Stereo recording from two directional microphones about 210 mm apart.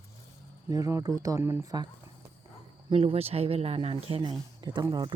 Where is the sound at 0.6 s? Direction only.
15° right (ahead or behind).